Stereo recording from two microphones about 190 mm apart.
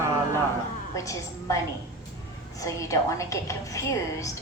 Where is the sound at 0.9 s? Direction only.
15° left (ahead or behind).